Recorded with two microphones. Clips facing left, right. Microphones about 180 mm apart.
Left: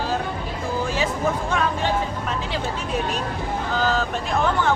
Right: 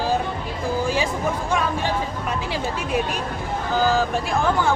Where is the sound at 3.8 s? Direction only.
10° right (ahead or behind).